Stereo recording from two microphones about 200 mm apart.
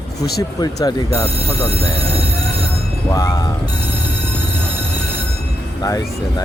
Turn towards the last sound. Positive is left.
turn(degrees=20)  # may be behind; listen again after turning